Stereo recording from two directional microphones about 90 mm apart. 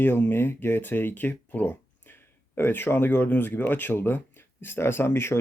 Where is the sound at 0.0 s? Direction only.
25° left (ahead or behind).